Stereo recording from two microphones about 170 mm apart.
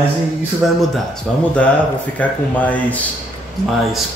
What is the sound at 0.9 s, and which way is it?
Speech, 5° left (ahead or behind).